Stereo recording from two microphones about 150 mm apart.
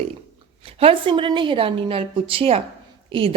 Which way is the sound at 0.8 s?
35° right (ahead or behind).